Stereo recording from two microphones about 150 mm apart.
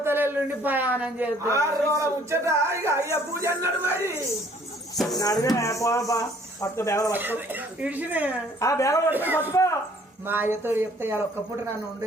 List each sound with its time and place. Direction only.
0.0 s a man's voice: 15° right (ahead or behind)
1.5 s speech: 20° right (ahead or behind)
4.9 s speech: centre (ahead or behind)
5.2 s speech: 25° left (ahead or behind)
7.1 s speech: 10° right (ahead or behind)
8.6 s speech: 20° left (ahead or behind)
9.0 s speech: 10° right (ahead or behind)
9.5 s a sound: 20° left (ahead or behind)
10.2 s speech: 15° right (ahead or behind)